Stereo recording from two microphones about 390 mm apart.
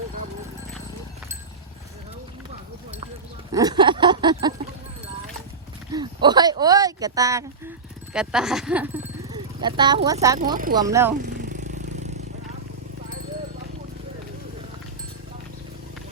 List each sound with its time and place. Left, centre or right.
3.5 s a sound: centre
5.9 s a sound: centre
8.1 s speech: centre
10.5 s speech: right
10.8 s speech: centre
11.2 s vehicle: centre